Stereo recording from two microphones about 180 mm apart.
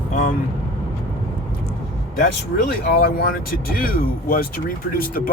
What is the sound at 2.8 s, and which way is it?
Speech, 55° left (ahead or behind).